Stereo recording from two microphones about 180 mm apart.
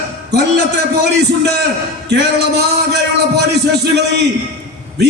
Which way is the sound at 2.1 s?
70° right (ahead or behind).